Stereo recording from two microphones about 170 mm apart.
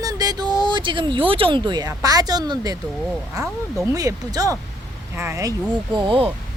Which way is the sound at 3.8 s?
20° right (ahead or behind).